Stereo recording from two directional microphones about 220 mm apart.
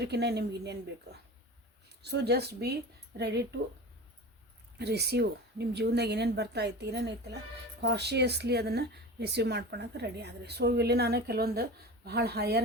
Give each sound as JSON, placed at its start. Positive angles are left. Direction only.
{"t": 0.0, "sound": "speech", "side_deg": -50}
{"t": 4.8, "sound": "speech", "side_deg": -50}